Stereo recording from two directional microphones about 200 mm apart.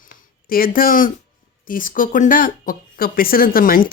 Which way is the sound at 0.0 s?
45° left (ahead or behind).